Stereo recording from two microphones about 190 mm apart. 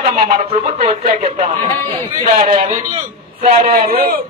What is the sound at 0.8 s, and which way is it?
Speech, 30° right (ahead or behind).